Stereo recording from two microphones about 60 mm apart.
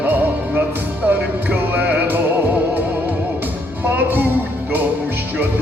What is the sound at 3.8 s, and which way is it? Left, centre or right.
Music, right.